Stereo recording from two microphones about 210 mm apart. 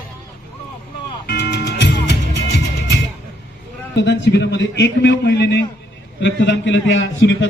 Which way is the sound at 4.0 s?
55° left (ahead or behind).